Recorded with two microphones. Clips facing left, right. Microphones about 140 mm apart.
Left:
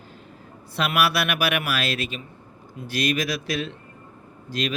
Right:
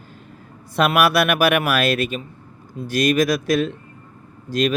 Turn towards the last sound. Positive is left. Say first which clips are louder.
# right 8 dB
turn(degrees=-45)  # may be behind; listen again after turning